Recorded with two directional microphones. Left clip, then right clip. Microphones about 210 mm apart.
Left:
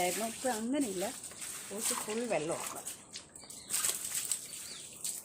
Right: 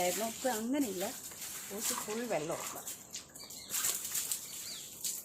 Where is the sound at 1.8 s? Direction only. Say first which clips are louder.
Left 1 dB; 40° left (ahead or behind).